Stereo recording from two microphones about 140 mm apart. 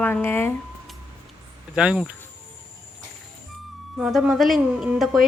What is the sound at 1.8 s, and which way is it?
Speech, 5° right (ahead or behind).